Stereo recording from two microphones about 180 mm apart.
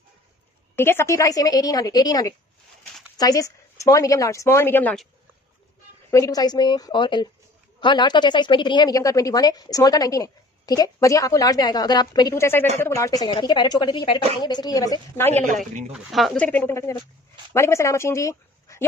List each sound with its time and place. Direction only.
0.7 s speech: 15° left (ahead or behind)
6.0 s speech: 20° left (ahead or behind)
15.9 s speech: centre (ahead or behind)
16.4 s speech: 10° left (ahead or behind)